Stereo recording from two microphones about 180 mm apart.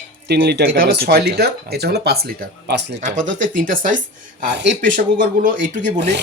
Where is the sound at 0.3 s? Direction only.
65° right (ahead or behind).